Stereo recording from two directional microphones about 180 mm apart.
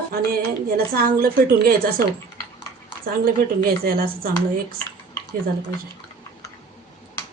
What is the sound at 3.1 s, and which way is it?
Speech, 55° right (ahead or behind).